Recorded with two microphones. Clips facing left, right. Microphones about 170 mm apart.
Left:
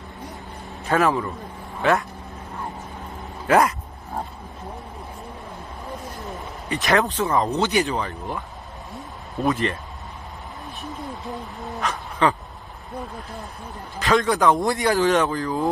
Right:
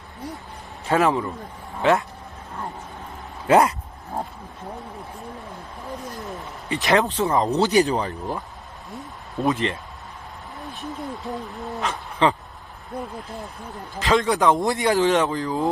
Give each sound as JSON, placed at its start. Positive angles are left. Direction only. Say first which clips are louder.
{"t": 0.8, "sound": "speech", "louder": "even", "side_deg": -20}
{"t": 3.4, "sound": "speech", "louder": "right 1 dB", "side_deg": -30}
{"t": 6.7, "sound": "speech", "louder": "right 1 dB", "side_deg": -20}
{"t": 7.5, "sound": "speech", "louder": "right 3 dB", "side_deg": -35}
{"t": 9.4, "sound": "speech", "louder": "even", "side_deg": -20}
{"t": 11.1, "sound": "speech", "louder": "right 2 dB", "side_deg": 0}
{"t": 11.8, "sound": "speech", "louder": "even", "side_deg": -25}
{"t": 13.9, "sound": "speech", "louder": "even", "side_deg": -25}